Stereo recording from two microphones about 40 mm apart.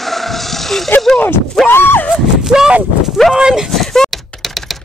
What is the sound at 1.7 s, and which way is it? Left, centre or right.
Speech, left.